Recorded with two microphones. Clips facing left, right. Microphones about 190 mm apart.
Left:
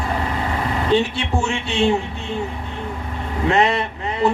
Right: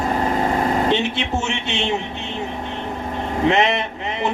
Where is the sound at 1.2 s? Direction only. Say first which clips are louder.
Left 1 dB; 20° right (ahead or behind).